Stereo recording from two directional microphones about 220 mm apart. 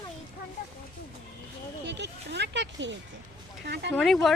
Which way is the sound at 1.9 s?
50° right (ahead or behind).